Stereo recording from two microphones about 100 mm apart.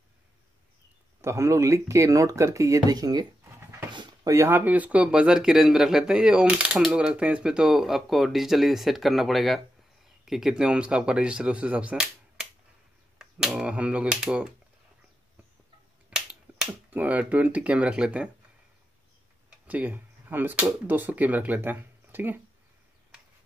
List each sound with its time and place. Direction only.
1.2 s speech: 30° right (ahead or behind)
3.9 s a sound: 50° right (ahead or behind)
4.3 s speech: 25° right (ahead or behind); by 14.5 s 10° right (ahead or behind)
16.1 s finger snapping: 10° right (ahead or behind)
16.9 s speech: 15° right (ahead or behind)
19.7 s speech: 15° right (ahead or behind)